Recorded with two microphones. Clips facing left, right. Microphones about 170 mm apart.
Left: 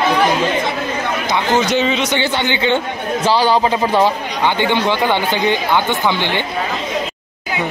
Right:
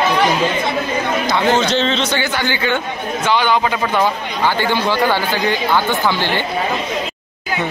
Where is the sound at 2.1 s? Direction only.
25° left (ahead or behind).